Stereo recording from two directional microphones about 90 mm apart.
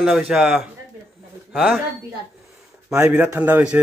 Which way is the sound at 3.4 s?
15° right (ahead or behind).